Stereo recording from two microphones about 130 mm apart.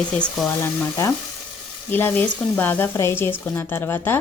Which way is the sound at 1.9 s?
15° left (ahead or behind).